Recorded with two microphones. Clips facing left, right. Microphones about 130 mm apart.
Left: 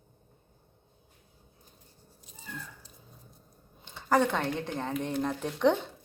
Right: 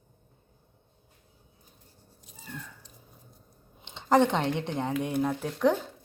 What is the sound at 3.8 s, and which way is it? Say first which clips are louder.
Speech: right 3 dB; 20° right (ahead or behind).